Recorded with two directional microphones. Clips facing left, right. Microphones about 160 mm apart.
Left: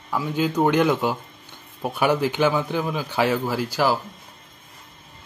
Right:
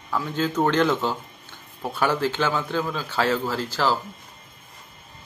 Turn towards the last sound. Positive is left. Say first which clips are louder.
# left 2 dB
turn(degrees=10)  # may be behind; listen again after turning